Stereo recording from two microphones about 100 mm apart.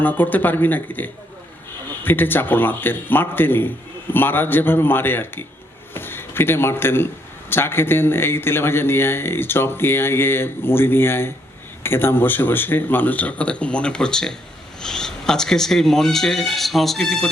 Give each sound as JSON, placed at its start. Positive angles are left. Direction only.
{"t": 0.0, "sound": "a man's voice", "side_deg": 20}